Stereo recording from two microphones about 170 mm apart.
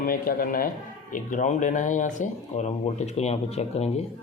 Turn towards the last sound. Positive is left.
turn(degrees=40)  # may be behind; listen again after turning